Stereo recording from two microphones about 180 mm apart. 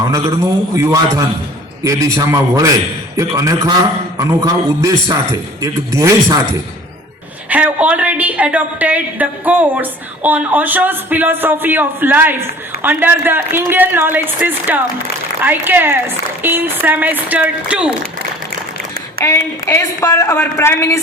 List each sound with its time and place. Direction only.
0.8 s a man's voice: 20° right (ahead or behind)
7.5 s a woman's voice: 10° right (ahead or behind)
19.2 s a woman's voice: 15° left (ahead or behind)